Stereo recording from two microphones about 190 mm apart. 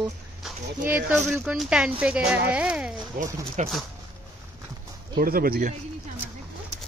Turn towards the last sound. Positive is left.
turn(degrees=-50)  # may be behind; listen again after turning